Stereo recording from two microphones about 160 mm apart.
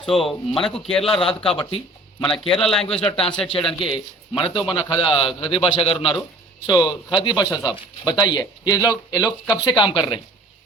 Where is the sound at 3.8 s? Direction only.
35° left (ahead or behind).